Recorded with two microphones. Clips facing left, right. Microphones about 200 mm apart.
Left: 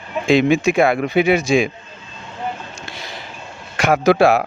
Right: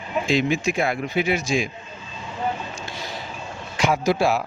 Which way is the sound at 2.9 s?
65° left (ahead or behind).